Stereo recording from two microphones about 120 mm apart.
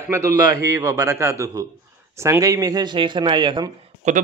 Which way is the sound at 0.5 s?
25° right (ahead or behind).